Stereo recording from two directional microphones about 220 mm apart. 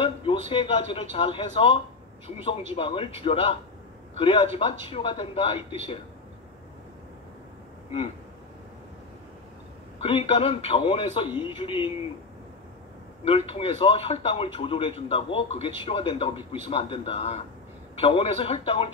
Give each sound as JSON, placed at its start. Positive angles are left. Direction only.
{"t": 0.0, "sound": "a man's voice", "side_deg": 25}
{"t": 10.0, "sound": "a man's voice", "side_deg": 25}
{"t": 13.2, "sound": "a man's voice", "side_deg": 25}